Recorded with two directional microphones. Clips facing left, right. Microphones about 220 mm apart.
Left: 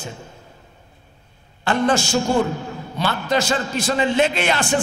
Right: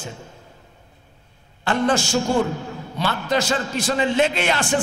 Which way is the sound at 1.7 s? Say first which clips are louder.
Left 1 dB; 10° left (ahead or behind).